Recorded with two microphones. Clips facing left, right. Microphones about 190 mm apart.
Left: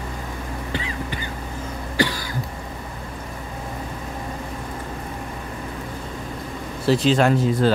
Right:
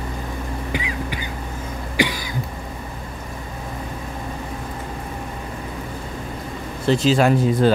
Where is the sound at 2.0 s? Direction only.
15° right (ahead or behind).